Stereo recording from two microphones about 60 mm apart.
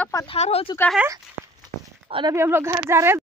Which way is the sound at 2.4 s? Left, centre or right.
Right.